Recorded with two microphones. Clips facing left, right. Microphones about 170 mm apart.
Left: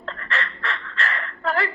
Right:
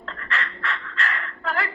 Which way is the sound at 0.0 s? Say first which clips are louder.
Left 2 dB; 35° left (ahead or behind).